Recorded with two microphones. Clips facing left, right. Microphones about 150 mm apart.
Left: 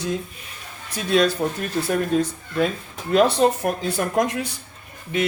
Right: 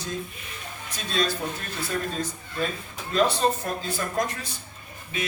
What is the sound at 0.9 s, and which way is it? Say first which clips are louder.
Speech: left 9 dB; 75° left (ahead or behind).